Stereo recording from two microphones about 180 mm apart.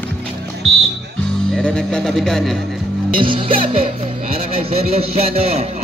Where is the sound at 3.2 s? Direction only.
30° right (ahead or behind).